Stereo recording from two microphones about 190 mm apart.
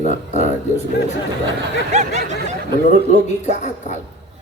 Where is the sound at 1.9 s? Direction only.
40° right (ahead or behind).